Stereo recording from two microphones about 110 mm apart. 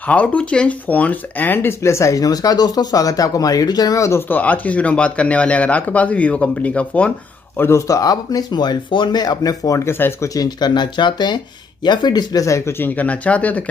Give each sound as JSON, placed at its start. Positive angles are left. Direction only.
{"t": 0.1, "sound": "speech", "side_deg": 10}
{"t": 4.3, "sound": "speech", "side_deg": 15}
{"t": 7.5, "sound": "speech", "side_deg": 25}
{"t": 10.3, "sound": "speech", "side_deg": 35}